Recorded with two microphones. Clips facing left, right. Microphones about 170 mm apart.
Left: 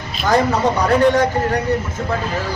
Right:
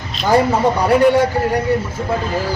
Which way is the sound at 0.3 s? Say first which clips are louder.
Right 2 dB; 10° right (ahead or behind).